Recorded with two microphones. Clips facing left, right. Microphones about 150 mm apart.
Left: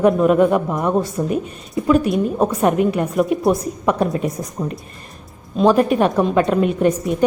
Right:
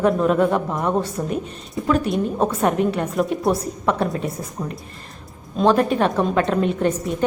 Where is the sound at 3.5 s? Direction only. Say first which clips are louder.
Left 3 dB; 10° left (ahead or behind).